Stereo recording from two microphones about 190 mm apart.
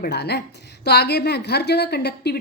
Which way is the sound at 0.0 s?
60° left (ahead or behind).